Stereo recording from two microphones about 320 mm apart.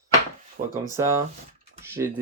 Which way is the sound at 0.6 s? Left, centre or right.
Right.